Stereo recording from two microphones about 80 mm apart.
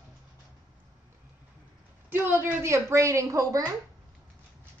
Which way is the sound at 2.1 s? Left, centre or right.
Right.